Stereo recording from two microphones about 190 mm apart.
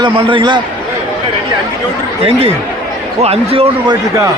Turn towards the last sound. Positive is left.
turn(degrees=-20)  # may be behind; listen again after turning